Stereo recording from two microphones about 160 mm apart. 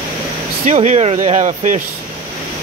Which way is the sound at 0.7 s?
45° right (ahead or behind).